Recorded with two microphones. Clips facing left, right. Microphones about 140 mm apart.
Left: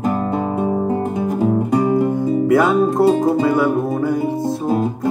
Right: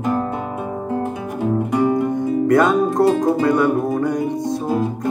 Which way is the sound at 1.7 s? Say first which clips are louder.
Right 1 dB; 25° left (ahead or behind).